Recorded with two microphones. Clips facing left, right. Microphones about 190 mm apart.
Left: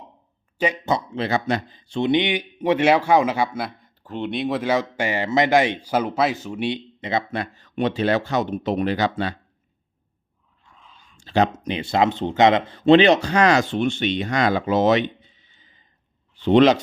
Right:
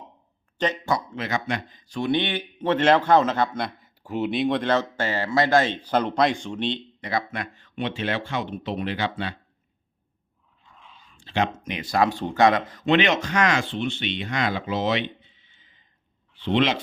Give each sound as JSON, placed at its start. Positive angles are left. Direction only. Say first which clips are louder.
{"t": 0.9, "sound": "a man's voice", "louder": "left 4 dB", "side_deg": 25}
{"t": 3.8, "sound": "a man's voice", "louder": "right 2 dB", "side_deg": -5}
{"t": 7.0, "sound": "speech", "louder": "left 3 dB", "side_deg": 25}
{"t": 7.3, "sound": "speech", "louder": "left 5 dB", "side_deg": 35}
{"t": 10.7, "sound": "a sound", "louder": "right 1 dB", "side_deg": 0}
{"t": 11.2, "sound": "speech", "louder": "left 5 dB", "side_deg": 40}